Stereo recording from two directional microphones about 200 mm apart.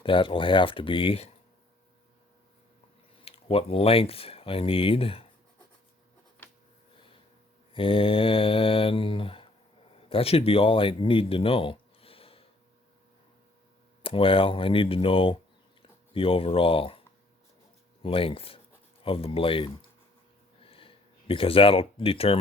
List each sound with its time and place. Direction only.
0.0 s speech: 25° left (ahead or behind)
3.2 s speech: 30° left (ahead or behind)
6.4 s a sound: 10° left (ahead or behind)
7.7 s speech: 25° left (ahead or behind)
14.0 s speech: 25° left (ahead or behind)
18.0 s speech: 25° left (ahead or behind)
20.7 s a sound: 25° left (ahead or behind)